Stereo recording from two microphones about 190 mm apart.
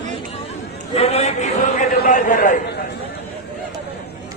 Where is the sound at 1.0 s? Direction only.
35° left (ahead or behind).